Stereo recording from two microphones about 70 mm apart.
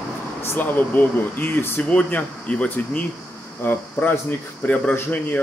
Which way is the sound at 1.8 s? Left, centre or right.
Centre.